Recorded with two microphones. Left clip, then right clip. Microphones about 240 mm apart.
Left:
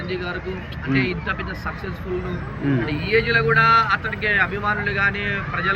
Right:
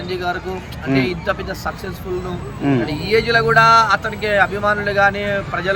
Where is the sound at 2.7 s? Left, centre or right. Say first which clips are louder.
Right 3 dB; centre.